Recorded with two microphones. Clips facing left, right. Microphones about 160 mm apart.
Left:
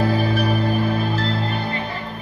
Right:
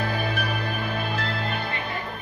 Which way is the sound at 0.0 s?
35° left (ahead or behind).